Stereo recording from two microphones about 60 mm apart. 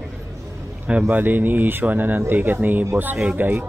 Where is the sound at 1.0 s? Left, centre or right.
Right.